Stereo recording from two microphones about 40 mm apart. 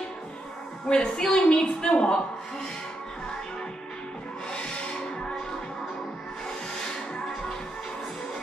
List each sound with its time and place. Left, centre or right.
0.8 s a woman's voice: centre
1.5 s a woman's voice: left
4.5 s music: centre